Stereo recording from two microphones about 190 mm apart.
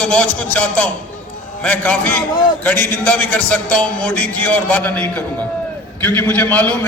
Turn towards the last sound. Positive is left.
turn(degrees=10)  # may be behind; listen again after turning